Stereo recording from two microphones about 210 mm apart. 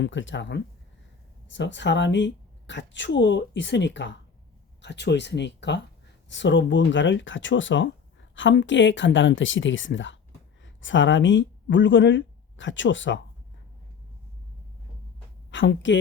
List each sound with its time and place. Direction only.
0.0 s speech: 60° left (ahead or behind)
15.4 s a woman's voice: 60° left (ahead or behind)